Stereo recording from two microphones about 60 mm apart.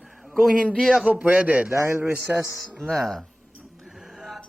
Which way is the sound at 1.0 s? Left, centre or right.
Right.